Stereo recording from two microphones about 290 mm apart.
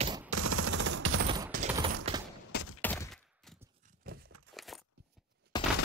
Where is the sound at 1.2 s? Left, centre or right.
Centre.